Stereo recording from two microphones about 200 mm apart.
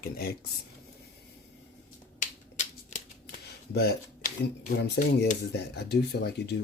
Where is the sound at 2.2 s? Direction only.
40° left (ahead or behind).